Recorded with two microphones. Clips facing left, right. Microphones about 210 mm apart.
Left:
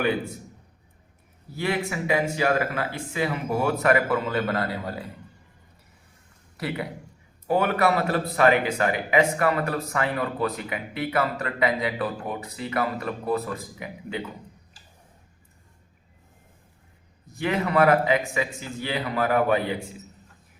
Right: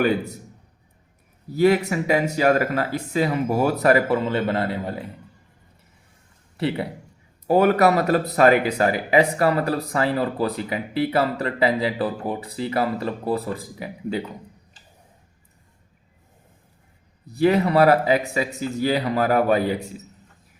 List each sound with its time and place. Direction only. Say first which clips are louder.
1.9 s speech: right 4 dB; 40° right (ahead or behind); by 5.0 s 25° right (ahead or behind)
6.6 s a man's voice: right 6 dB; 30° right (ahead or behind)
7.4 s speech: right 5 dB; 40° right (ahead or behind)
17.2 s speech: right 8 dB; 35° right (ahead or behind)